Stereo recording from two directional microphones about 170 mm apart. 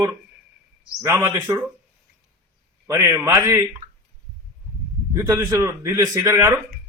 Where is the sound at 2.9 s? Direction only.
15° right (ahead or behind).